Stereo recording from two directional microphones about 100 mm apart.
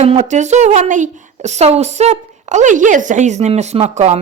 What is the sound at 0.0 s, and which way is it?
Speech, 90° right.